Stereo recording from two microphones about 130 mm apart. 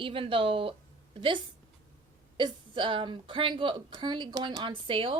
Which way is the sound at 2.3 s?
40° right (ahead or behind).